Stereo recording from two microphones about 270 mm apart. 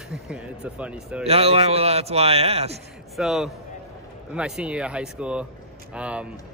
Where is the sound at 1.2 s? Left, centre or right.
Right.